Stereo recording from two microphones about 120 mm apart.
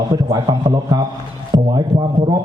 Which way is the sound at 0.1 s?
30° right (ahead or behind).